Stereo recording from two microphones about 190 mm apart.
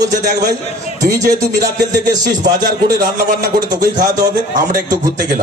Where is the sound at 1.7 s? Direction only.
20° right (ahead or behind).